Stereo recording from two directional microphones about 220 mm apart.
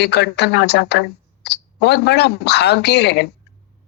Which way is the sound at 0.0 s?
50° left (ahead or behind).